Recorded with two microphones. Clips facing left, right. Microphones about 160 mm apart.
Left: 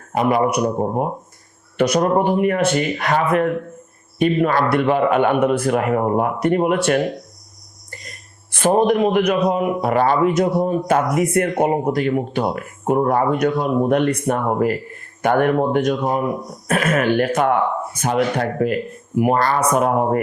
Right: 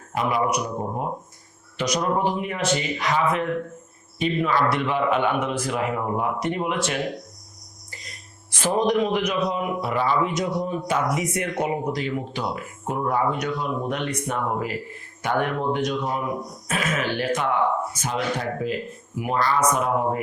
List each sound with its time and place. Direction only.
0.2 s a man's voice: 55° left (ahead or behind)
8.5 s a man's voice: 55° left (ahead or behind)